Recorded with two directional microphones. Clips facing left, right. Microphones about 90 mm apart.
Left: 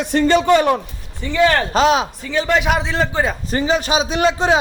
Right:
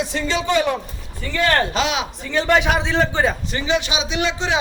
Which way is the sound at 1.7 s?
40° left (ahead or behind).